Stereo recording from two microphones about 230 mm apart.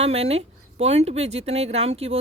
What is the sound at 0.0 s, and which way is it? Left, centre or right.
Speech, right.